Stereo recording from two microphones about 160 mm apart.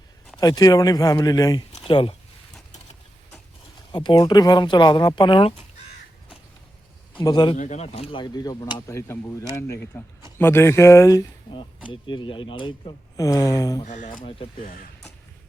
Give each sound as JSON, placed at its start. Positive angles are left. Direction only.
{"t": 0.3, "sound": "speech", "side_deg": 25}
{"t": 1.7, "sound": "a sound", "side_deg": 30}
{"t": 3.9, "sound": "speech", "side_deg": 25}
{"t": 7.2, "sound": "speech", "side_deg": 30}
{"t": 7.5, "sound": "speech", "side_deg": 50}
{"t": 11.9, "sound": "speech", "side_deg": 30}
{"t": 13.1, "sound": "speech", "side_deg": 20}
{"t": 13.8, "sound": "speech", "side_deg": 55}
{"t": 14.6, "sound": "speech", "side_deg": 65}